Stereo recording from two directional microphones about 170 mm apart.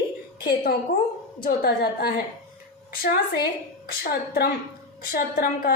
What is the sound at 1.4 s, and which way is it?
A woman's voice, 65° left (ahead or behind).